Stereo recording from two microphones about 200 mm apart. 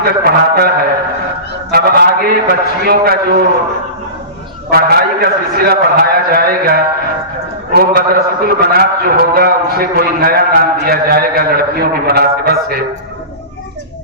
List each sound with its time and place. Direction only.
0.0 s a man's voice: 50° right (ahead or behind)
4.7 s a man's voice: 50° right (ahead or behind)